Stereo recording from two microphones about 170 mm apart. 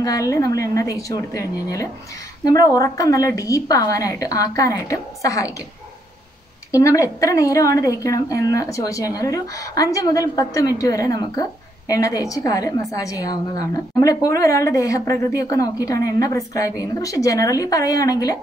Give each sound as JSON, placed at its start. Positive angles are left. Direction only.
{"t": 0.0, "sound": "a woman's voice", "side_deg": 20}
{"t": 6.7, "sound": "a woman's voice", "side_deg": 20}